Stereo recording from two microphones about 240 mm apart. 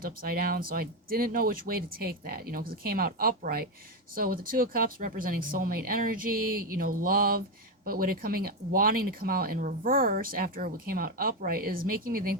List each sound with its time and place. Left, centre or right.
0.0 s speech: right